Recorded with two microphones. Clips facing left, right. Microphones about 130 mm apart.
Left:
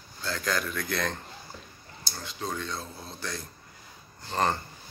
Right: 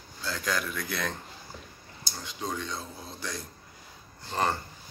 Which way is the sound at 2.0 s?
15° right (ahead or behind).